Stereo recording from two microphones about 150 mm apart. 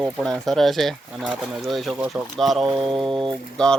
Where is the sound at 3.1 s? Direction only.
30° right (ahead or behind).